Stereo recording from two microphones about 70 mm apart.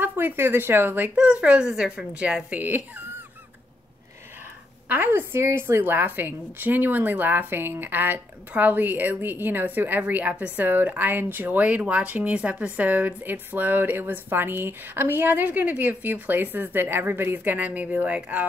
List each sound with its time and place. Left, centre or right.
0.0 s speech: right
1.1 s speech: centre
4.8 s a woman's voice: right